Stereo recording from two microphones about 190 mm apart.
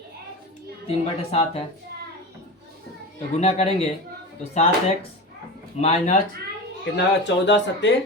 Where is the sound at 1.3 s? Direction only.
30° left (ahead or behind).